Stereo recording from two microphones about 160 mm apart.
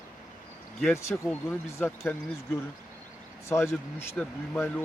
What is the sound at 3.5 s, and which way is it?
A man's voice, 15° left (ahead or behind).